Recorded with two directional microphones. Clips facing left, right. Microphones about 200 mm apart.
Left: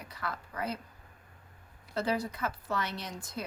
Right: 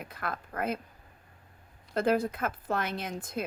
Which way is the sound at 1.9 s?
50° right (ahead or behind).